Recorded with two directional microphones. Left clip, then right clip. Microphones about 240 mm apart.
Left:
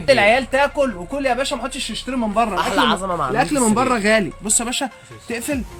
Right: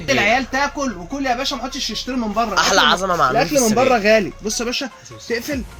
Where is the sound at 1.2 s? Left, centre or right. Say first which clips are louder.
Left 1 dB; left.